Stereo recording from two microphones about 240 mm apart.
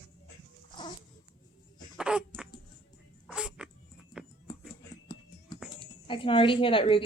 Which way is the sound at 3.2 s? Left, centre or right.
Centre.